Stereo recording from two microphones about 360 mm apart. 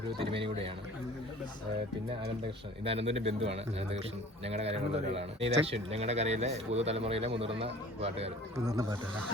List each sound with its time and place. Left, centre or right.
0.3 s speech: centre
2.8 s speech: centre